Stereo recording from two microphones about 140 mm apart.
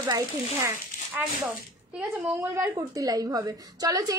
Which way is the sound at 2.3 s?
20° right (ahead or behind).